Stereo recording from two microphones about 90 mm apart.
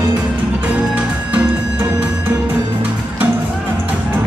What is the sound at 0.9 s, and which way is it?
Music, 15° right (ahead or behind).